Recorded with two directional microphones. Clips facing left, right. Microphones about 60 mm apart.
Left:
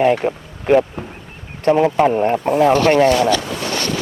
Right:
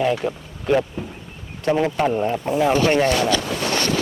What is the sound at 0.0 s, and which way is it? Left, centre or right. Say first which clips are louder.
Speech: left 6 dB; left.